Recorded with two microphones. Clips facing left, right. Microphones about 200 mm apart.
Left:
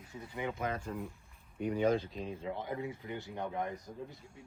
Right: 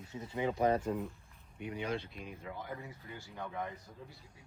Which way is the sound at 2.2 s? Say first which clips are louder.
Left 6 dB; 30° left (ahead or behind).